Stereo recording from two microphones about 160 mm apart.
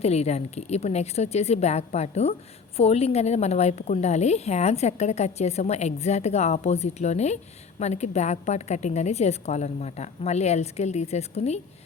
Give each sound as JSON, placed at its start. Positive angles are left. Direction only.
{"t": 0.0, "sound": "a woman's voice", "side_deg": 40}